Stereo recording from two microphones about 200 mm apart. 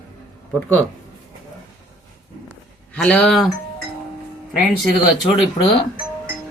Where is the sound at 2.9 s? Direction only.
5° left (ahead or behind).